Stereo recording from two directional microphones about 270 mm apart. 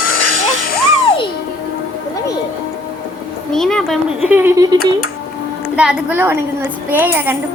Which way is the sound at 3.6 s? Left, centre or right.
Centre.